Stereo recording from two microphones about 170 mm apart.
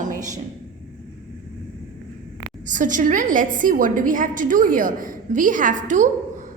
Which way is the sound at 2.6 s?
50° right (ahead or behind).